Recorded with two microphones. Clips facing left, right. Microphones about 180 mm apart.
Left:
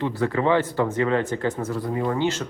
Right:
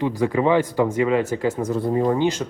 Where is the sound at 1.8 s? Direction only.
30° right (ahead or behind).